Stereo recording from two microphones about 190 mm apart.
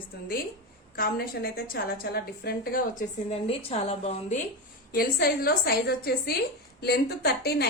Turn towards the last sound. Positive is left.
turn(degrees=55)  # may be behind; listen again after turning